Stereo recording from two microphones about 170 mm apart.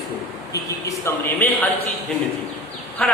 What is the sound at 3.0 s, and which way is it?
Speech, 5° left (ahead or behind).